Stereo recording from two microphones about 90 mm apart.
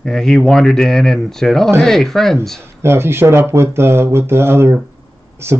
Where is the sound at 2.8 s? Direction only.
25° right (ahead or behind).